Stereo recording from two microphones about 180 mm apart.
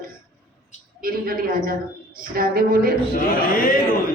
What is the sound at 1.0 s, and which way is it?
A woman's voice, 50° right (ahead or behind).